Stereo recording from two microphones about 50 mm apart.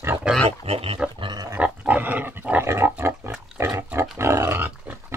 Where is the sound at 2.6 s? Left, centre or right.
Right.